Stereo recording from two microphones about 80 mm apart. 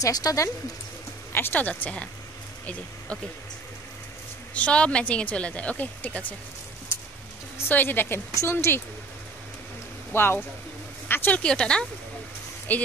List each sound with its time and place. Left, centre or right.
0.0 s speech: left
1.3 s speech: left
4.6 s a woman's voice: centre
7.5 s speech: left
10.1 s speech: left
11.4 s a woman's voice: centre
12.7 s speech: left